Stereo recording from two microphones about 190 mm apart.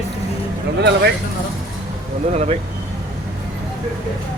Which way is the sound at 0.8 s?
60° right (ahead or behind).